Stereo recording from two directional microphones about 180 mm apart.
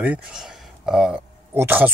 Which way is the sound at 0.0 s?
5° right (ahead or behind).